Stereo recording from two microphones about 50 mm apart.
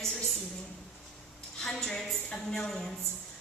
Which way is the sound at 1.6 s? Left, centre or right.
Centre.